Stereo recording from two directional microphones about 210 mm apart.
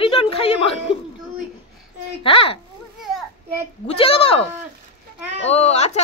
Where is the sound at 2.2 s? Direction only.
25° left (ahead or behind).